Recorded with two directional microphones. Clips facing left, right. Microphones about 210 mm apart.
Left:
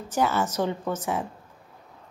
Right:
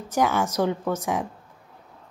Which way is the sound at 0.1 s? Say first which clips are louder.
Right 2 dB; 10° right (ahead or behind).